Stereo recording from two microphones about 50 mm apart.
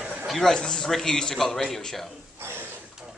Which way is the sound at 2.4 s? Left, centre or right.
Right.